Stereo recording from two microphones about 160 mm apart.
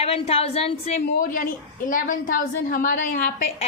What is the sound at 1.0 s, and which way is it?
A woman's voice, 60° left (ahead or behind).